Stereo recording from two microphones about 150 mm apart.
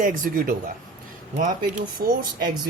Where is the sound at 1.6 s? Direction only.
75° right (ahead or behind).